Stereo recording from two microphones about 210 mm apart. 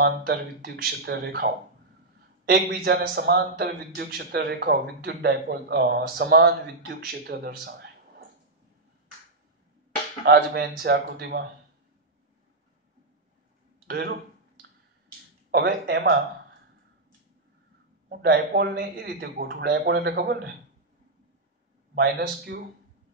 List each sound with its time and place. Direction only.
0.0 s speech: 50° right (ahead or behind)
10.2 s speech: 50° right (ahead or behind)
15.5 s speech: 55° right (ahead or behind)
18.1 s speech: 50° right (ahead or behind)
21.9 s speech: 50° right (ahead or behind)